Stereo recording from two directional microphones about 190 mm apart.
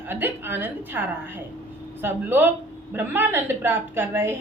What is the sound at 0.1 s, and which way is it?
A woman's voice, 10° right (ahead or behind).